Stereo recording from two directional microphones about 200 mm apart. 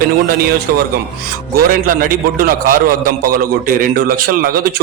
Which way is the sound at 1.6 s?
45° right (ahead or behind).